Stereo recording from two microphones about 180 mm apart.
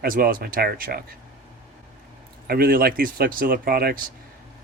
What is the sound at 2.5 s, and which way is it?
Speech, 55° right (ahead or behind).